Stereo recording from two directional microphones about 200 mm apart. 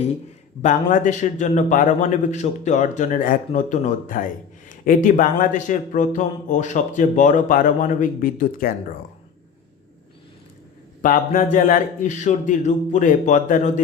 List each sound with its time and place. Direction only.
0.6 s a man's voice: 40° left (ahead or behind)
11.0 s a man's voice: 40° left (ahead or behind)